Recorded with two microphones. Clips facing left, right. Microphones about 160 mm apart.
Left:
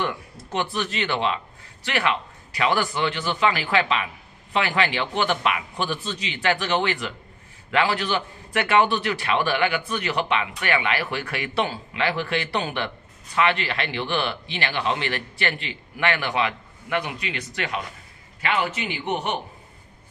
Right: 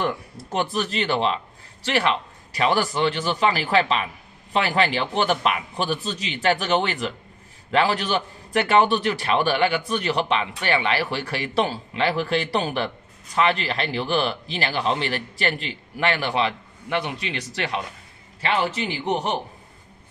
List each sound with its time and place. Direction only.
0.0 s a man's voice: 40° right (ahead or behind)
18.4 s a man's voice: 35° right (ahead or behind)